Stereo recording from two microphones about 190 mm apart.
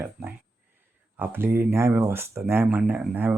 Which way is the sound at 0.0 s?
10° right (ahead or behind).